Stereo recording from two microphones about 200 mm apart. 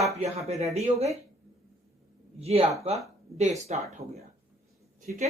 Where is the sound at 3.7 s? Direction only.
30° right (ahead or behind).